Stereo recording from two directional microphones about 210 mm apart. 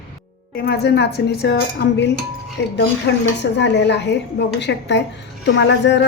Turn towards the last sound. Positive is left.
turn(degrees=55)  # may be behind; listen again after turning